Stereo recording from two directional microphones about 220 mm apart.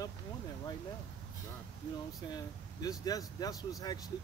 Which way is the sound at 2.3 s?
15° left (ahead or behind).